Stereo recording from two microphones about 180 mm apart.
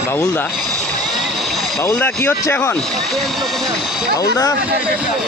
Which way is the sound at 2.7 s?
Centre (ahead or behind).